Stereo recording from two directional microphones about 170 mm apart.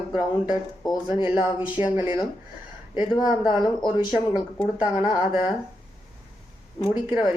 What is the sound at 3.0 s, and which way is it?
Speech, 25° left (ahead or behind).